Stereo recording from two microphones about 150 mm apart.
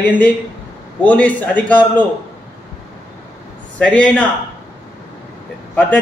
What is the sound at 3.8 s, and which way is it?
Speech, 5° left (ahead or behind).